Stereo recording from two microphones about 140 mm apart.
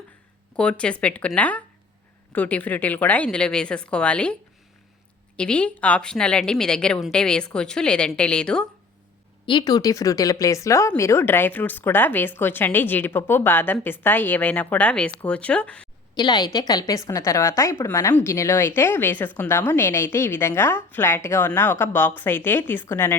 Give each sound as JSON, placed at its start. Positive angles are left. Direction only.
{"t": 0.5, "sound": "a woman's voice", "side_deg": 5}
{"t": 5.4, "sound": "a woman's voice", "side_deg": 10}
{"t": 9.5, "sound": "a woman's voice", "side_deg": 30}
{"t": 16.1, "sound": "a woman's voice", "side_deg": 30}